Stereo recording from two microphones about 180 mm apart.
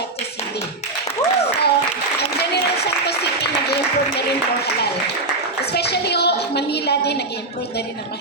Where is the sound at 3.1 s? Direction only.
65° left (ahead or behind).